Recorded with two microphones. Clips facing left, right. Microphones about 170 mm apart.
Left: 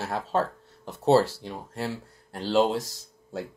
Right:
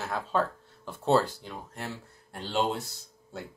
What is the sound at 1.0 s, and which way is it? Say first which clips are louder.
Speech: left 4 dB; 80° left.